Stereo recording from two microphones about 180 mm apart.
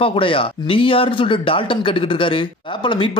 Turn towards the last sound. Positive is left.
turn(degrees=25)  # may be behind; listen again after turning